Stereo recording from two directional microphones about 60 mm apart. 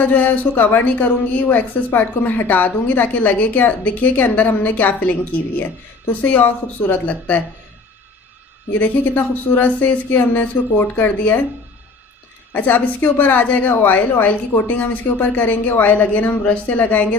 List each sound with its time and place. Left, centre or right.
0.0 s a woman's voice: left
2.5 s a woman's voice: left
8.7 s speech: left
12.5 s a woman's voice: left